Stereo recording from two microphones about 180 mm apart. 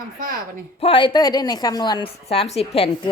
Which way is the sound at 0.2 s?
50° right (ahead or behind).